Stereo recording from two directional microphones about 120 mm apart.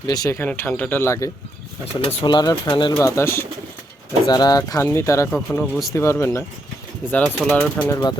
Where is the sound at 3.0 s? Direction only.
20° left (ahead or behind).